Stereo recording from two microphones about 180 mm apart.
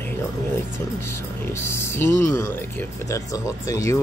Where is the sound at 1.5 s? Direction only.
15° left (ahead or behind).